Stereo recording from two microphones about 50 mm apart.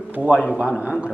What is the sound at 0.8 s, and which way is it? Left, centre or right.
Speech, right.